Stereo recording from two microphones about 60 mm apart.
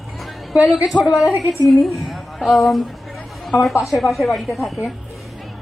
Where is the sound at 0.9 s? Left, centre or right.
Left.